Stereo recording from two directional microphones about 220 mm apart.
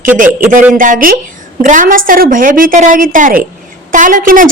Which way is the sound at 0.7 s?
40° right (ahead or behind).